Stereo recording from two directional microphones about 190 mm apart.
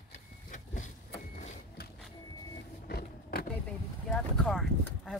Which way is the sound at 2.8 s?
55° left (ahead or behind).